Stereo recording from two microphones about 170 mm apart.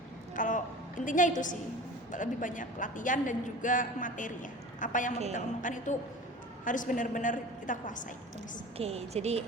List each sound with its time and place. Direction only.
0.3 s a sound: 50° left (ahead or behind)
1.0 s a man's voice: 50° left (ahead or behind)
8.8 s a woman's voice: 40° right (ahead or behind)